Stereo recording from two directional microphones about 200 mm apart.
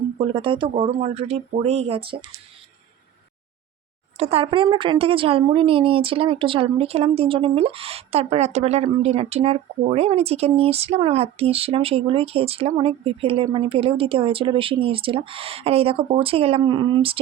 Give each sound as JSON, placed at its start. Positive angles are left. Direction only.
{"t": 0.3, "sound": "speech", "side_deg": -25}
{"t": 4.2, "sound": "speech", "side_deg": -30}